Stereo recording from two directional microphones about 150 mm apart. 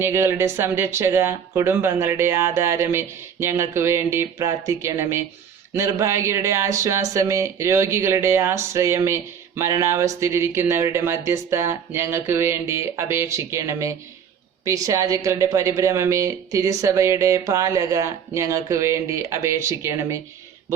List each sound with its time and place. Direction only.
0.0 s speech: 15° right (ahead or behind)